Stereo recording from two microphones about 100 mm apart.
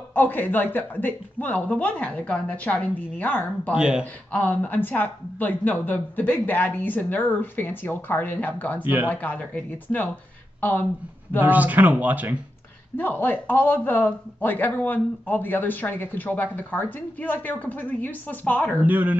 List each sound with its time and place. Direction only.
0.1 s a man's voice: 20° left (ahead or behind)
3.7 s speech: 10° right (ahead or behind)
4.0 s a man's voice: 15° left (ahead or behind)
8.8 s speech: 15° right (ahead or behind)
9.1 s a man's voice: 15° left (ahead or behind)
11.4 s speech: 15° right (ahead or behind)
12.9 s a man's voice: 20° left (ahead or behind)
18.8 s speech: 15° right (ahead or behind)